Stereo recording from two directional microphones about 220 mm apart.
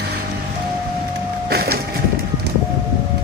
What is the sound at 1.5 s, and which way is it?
Vehicle, 45° right (ahead or behind).